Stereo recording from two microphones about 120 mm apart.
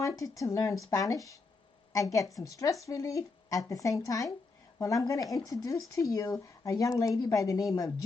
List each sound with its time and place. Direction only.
0.0 s a woman's voice: 25° left (ahead or behind)